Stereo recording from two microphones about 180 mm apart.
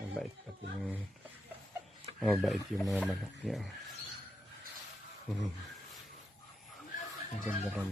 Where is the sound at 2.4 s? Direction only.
Centre (ahead or behind).